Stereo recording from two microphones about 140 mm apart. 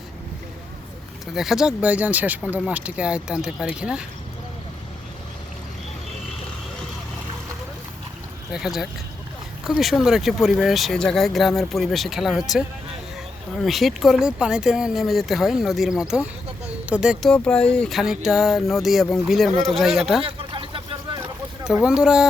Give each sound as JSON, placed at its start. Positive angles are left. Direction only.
{"t": 1.3, "sound": "speech", "side_deg": -5}
{"t": 8.5, "sound": "speech", "side_deg": -5}
{"t": 17.3, "sound": "speech", "side_deg": 5}
{"t": 20.2, "sound": "vehicle", "side_deg": -40}
{"t": 21.2, "sound": "boat", "side_deg": -5}